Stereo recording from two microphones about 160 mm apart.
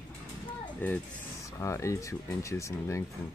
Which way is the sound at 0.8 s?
10° left (ahead or behind).